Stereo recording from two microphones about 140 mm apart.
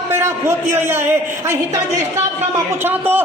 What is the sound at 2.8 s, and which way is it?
Speech, 15° right (ahead or behind).